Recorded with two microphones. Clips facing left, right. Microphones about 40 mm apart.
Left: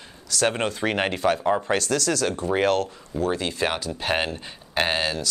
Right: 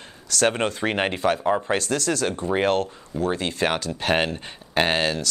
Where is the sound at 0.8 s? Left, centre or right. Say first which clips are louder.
Left 1 dB; right.